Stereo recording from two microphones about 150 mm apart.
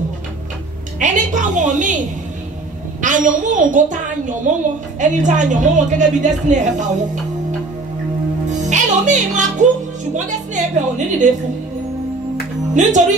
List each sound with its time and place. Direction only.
0.9 s a woman's voice: 55° right (ahead or behind)
8.5 s music: 55° right (ahead or behind)
10.1 s a woman's voice: 55° right (ahead or behind)
12.8 s a woman's voice: 55° right (ahead or behind)